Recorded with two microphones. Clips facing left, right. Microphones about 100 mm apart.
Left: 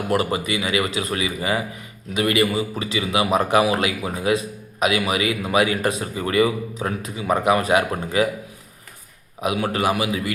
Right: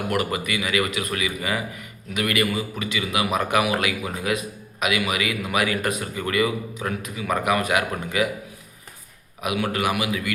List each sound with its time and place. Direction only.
0.1 s a man's voice: 30° left (ahead or behind)
9.4 s a man's voice: 30° left (ahead or behind)